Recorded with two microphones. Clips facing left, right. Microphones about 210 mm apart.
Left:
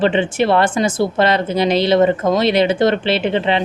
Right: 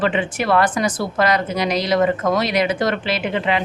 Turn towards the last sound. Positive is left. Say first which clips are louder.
# left 4 dB
turn(degrees=30)  # may be behind; listen again after turning